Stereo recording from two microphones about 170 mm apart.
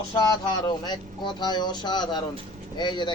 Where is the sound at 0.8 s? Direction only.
25° left (ahead or behind).